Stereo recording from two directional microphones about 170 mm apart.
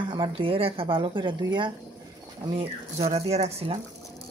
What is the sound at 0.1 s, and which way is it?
Speech, 30° right (ahead or behind).